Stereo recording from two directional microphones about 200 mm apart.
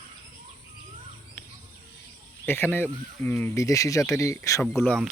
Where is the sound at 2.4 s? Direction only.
10° left (ahead or behind).